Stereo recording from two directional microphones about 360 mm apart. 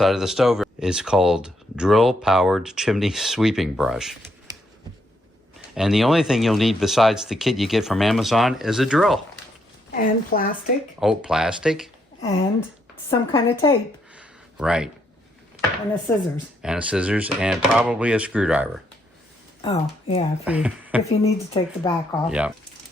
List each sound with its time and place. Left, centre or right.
0.0 s speech: centre
5.7 s speech: centre
9.9 s a woman's voice: left
11.0 s speech: centre
13.1 s speech: centre
14.2 s a sound: centre
16.1 s speech: centre
19.6 s speech: centre
20.4 s speech: centre
21.1 s speech: centre
22.3 s speech: centre